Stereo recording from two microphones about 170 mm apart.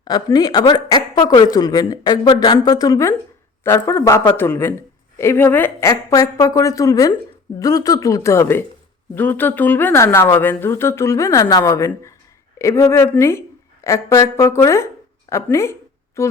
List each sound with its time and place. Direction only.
0.0 s a woman's voice: 25° left (ahead or behind)